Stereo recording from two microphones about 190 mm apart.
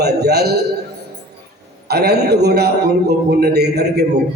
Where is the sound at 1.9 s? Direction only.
60° right (ahead or behind).